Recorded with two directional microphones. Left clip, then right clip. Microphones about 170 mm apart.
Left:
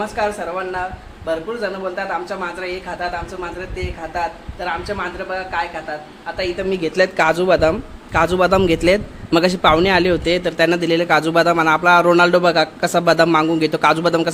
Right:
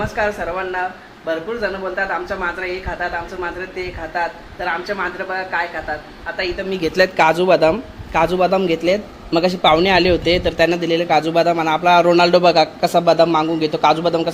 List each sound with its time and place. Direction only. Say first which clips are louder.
0.0 s a woman's voice: right 1 dB; 5° left (ahead or behind)
4.6 s a woman's voice: right 2 dB; centre (ahead or behind)
6.8 s a woman's voice: right 2 dB; centre (ahead or behind)
8.4 s a man's voice: left 1 dB; 25° left (ahead or behind)